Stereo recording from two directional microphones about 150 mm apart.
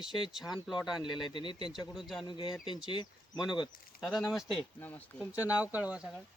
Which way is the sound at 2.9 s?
30° left (ahead or behind).